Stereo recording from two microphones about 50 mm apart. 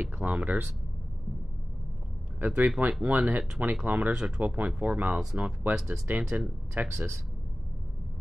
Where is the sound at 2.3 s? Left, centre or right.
Right.